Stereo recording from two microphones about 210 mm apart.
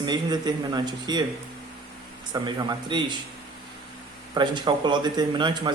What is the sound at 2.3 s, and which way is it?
Speech, 20° right (ahead or behind).